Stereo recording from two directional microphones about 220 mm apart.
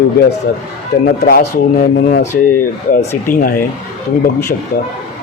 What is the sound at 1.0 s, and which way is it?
Speech, 40° left (ahead or behind).